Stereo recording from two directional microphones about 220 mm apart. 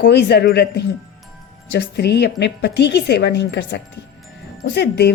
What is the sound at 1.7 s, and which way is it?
A woman's voice, 50° left (ahead or behind).